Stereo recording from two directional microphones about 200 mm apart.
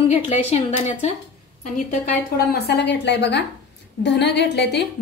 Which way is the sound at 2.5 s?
55° left (ahead or behind).